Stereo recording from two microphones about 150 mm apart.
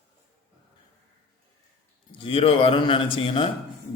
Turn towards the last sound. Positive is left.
turn(degrees=35)  # may be behind; listen again after turning